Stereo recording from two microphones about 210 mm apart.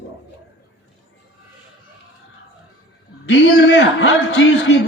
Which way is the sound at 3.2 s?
60° left (ahead or behind).